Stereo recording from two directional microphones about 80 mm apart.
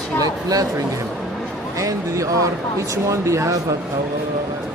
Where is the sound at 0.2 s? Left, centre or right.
Right.